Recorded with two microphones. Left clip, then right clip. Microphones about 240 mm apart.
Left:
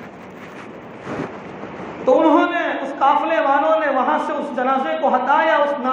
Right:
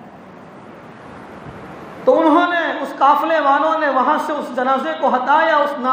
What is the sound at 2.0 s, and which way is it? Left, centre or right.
A man's voice, right.